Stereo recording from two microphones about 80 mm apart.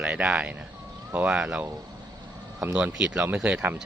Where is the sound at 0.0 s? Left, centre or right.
Centre.